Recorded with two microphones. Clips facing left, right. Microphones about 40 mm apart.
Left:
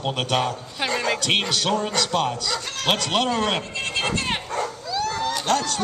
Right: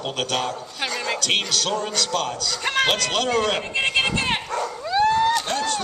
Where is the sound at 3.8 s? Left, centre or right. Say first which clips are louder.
Right 8 dB; right.